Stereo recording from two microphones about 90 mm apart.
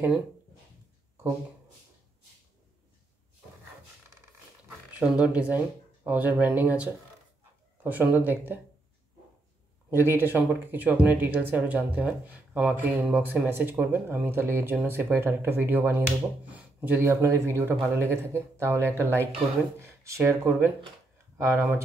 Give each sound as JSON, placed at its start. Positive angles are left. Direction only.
{"t": 4.6, "sound": "speech", "side_deg": -15}
{"t": 9.9, "sound": "speech", "side_deg": -25}